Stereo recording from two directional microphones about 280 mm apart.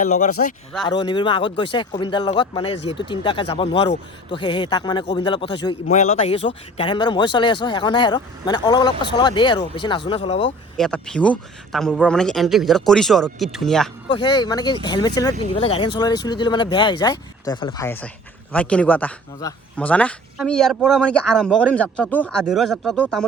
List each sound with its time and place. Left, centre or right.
0.2 s speech: left
0.9 s speech: centre
10.8 s a man's voice: centre
14.1 s a man's voice: centre